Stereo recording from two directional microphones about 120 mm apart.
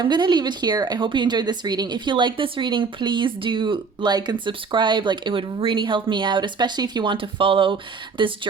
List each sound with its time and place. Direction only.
0.0 s a woman's voice: 40° right (ahead or behind)